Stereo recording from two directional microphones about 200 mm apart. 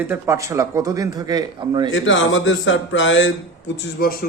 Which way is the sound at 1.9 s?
70° left (ahead or behind).